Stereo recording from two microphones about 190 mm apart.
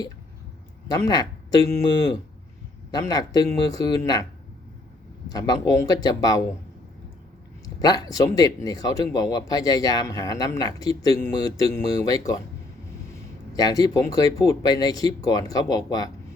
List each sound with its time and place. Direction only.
0.9 s speech: 20° left (ahead or behind)
2.9 s speech: 20° left (ahead or behind)
5.3 s speech: 20° left (ahead or behind)
7.8 s speech: 20° left (ahead or behind)
13.6 s speech: 20° left (ahead or behind)